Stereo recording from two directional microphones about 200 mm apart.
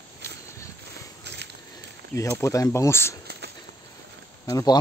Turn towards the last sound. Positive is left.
turn(degrees=20)  # may be behind; listen again after turning